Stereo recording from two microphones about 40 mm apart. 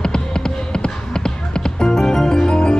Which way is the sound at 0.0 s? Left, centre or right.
Centre.